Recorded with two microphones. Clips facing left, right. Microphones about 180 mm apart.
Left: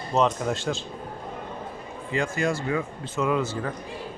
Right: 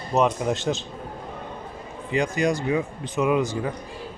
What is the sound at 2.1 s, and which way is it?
Speech, 20° right (ahead or behind).